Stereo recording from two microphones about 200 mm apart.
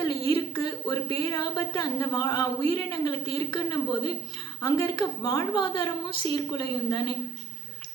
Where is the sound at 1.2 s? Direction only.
20° left (ahead or behind).